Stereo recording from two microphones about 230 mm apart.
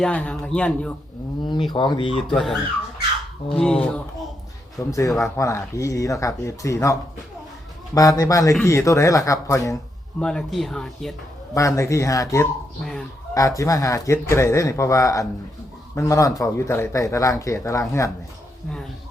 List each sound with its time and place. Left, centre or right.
0.0 s speech: centre
1.5 s speech: left
2.3 s speech: centre
7.9 s speech: centre
11.5 s speech: centre
12.8 s speech: centre
13.3 s speech: centre